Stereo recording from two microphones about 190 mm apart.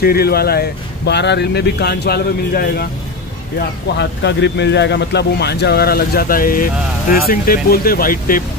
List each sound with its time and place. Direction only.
0.0 s speech: 55° left (ahead or behind)
3.5 s speech: 65° left (ahead or behind); by 8.5 s 50° left (ahead or behind)